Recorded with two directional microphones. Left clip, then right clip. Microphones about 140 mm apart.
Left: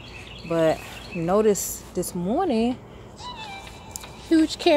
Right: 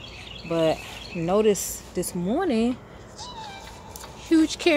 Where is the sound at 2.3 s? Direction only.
10° right (ahead or behind).